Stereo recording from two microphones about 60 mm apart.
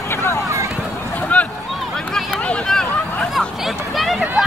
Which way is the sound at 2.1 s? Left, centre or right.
Centre.